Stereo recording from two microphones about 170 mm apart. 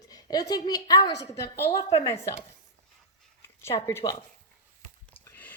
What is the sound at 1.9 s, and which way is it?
Speech, 35° left (ahead or behind).